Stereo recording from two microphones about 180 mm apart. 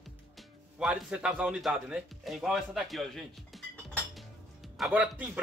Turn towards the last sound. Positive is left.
turn(degrees=-10)  # may be behind; listen again after turning